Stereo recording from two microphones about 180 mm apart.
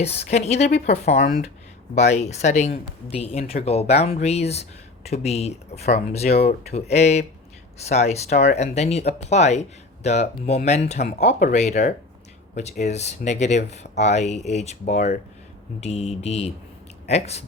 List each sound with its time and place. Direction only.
0.2 s speech: 40° left (ahead or behind)